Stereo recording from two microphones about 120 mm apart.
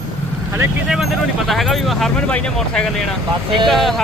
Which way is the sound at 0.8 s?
5° right (ahead or behind).